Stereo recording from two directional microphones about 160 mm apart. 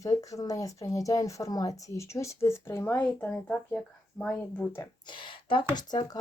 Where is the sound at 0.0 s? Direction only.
20° left (ahead or behind).